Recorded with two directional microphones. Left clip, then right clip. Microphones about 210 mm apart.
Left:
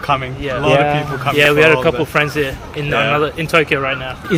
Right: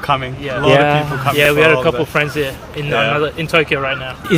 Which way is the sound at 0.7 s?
50° right (ahead or behind).